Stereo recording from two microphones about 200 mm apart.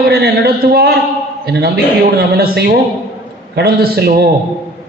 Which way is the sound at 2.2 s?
50° right (ahead or behind).